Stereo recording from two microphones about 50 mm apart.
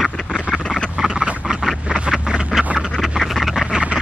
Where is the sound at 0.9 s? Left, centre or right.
Centre.